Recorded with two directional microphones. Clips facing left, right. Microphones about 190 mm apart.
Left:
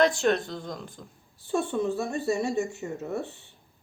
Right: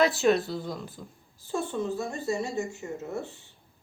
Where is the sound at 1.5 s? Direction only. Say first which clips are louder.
Left 3 dB; 65° left (ahead or behind).